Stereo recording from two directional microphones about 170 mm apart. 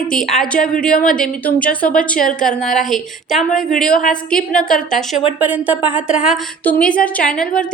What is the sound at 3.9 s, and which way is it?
Speech, 55° left (ahead or behind).